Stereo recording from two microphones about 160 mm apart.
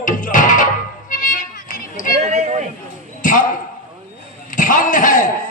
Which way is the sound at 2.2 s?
45° right (ahead or behind).